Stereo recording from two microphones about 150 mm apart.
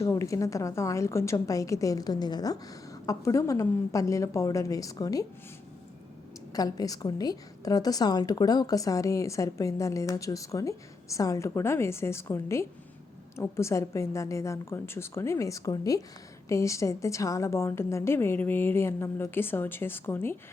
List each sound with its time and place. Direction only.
0.0 s a woman's voice: 20° left (ahead or behind)
6.5 s a woman's voice: 25° left (ahead or behind)